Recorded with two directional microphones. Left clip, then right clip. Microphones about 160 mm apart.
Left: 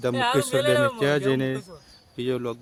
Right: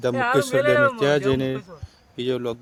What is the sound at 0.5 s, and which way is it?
Speech, 25° left (ahead or behind).